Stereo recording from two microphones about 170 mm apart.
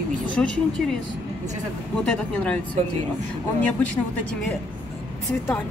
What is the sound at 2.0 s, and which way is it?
Speech, 5° left (ahead or behind).